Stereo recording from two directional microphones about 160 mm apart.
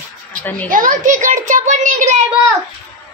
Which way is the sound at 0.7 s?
55° right (ahead or behind).